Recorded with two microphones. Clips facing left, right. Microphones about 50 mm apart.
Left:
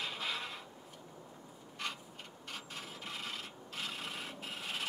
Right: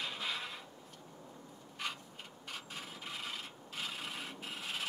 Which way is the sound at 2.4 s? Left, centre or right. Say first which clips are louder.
Even; centre.